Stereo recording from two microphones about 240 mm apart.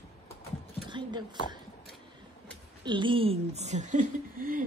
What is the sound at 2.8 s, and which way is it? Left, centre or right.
A woman's voice, centre.